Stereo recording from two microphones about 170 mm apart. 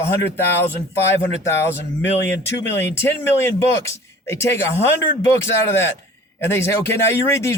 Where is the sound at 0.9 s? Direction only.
15° left (ahead or behind).